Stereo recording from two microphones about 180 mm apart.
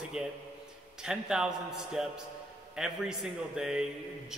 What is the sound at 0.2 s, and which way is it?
A man's voice, 5° right (ahead or behind).